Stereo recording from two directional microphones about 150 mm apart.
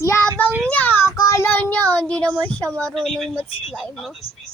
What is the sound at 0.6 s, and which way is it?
Child singing, 10° left (ahead or behind).